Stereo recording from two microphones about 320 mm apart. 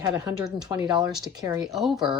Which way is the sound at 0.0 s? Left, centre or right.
Centre.